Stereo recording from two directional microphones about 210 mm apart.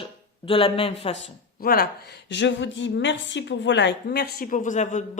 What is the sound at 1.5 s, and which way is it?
Speech, 45° left (ahead or behind).